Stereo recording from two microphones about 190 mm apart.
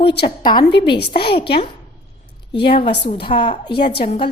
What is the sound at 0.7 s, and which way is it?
Speech, 60° left (ahead or behind).